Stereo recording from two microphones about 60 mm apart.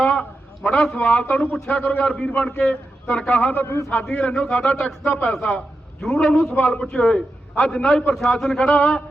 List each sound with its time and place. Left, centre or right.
0.0 s a man's voice: centre
1.8 s a man's voice: left
2.1 s a man's voice: centre
3.5 s a man's voice: left
3.8 s a man's voice: centre